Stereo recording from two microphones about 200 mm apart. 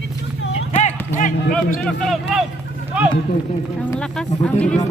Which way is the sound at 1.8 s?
Centre (ahead or behind).